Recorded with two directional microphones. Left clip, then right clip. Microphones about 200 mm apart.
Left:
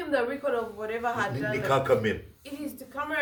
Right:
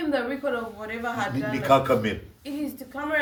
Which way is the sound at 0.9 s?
15° left (ahead or behind).